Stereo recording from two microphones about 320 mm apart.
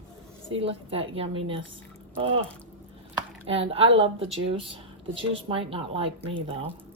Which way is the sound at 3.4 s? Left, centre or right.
Centre.